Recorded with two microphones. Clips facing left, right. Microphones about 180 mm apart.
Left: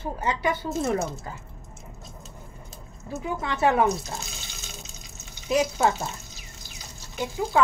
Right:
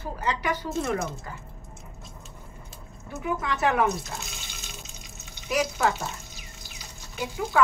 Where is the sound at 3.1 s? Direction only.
30° left (ahead or behind).